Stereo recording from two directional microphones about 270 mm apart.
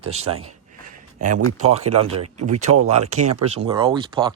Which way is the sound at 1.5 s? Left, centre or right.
Right.